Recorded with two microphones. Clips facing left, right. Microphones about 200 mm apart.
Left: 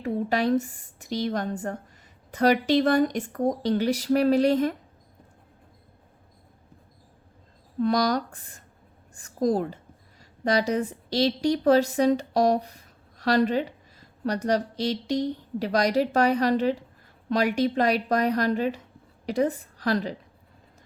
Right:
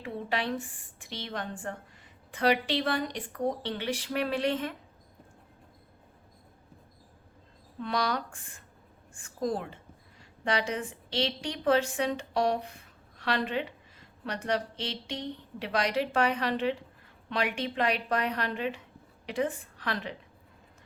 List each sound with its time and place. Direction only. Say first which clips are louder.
0.0 s speech: left 8 dB; 40° left (ahead or behind)
7.8 s a woman's voice: left 8 dB; 40° left (ahead or behind)